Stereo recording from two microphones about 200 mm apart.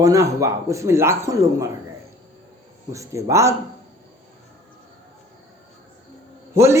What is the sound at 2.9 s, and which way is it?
Speech, 15° right (ahead or behind).